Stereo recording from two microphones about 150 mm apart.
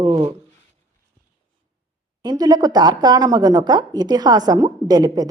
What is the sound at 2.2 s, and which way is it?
Speech, 25° right (ahead or behind).